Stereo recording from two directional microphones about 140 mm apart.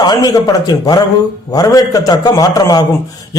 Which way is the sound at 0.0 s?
30° left (ahead or behind).